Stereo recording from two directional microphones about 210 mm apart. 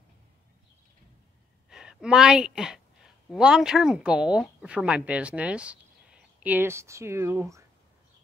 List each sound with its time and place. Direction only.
1.7 s a woman's voice: 5° right (ahead or behind)